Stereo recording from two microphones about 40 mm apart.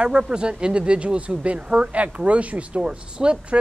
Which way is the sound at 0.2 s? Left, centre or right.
Right.